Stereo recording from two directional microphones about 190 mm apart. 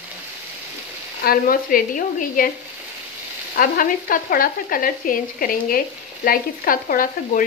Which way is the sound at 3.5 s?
50° left (ahead or behind).